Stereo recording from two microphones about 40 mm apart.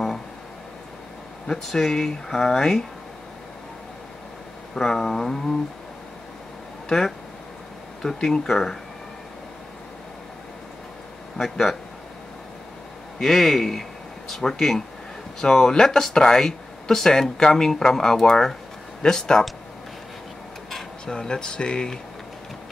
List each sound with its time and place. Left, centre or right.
1.5 s speech: centre
4.7 s speech: centre
6.9 s speech: centre
11.3 s speech: centre
13.2 s a man's voice: centre
21.0 s speech: centre